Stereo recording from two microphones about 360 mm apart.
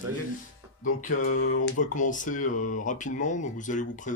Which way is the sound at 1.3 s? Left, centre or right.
Left.